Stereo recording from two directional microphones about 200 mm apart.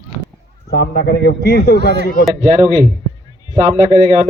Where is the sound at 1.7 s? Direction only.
55° right (ahead or behind).